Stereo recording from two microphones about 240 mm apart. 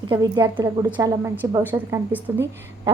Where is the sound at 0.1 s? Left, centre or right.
Centre.